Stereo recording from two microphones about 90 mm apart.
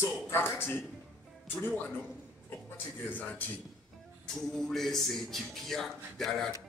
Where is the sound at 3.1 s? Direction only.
20° left (ahead or behind).